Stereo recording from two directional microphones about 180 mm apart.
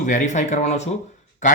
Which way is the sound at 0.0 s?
45° left (ahead or behind).